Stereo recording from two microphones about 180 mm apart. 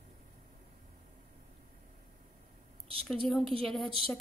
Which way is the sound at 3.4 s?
30° right (ahead or behind).